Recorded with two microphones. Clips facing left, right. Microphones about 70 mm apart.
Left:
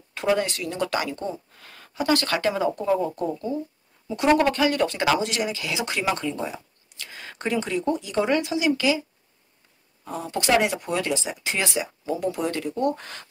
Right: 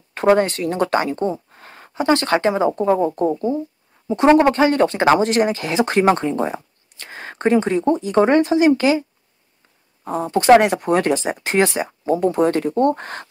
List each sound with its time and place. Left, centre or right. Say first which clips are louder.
0.1 s speech: right 8 dB; right
10.0 s speech: right 11 dB; right
10.6 s speech: right 8 dB; right